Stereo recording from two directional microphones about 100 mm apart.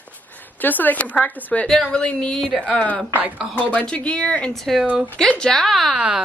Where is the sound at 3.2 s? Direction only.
15° right (ahead or behind).